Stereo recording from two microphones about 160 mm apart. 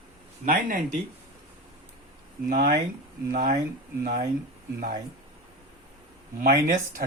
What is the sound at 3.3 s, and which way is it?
Speech, 65° right (ahead or behind).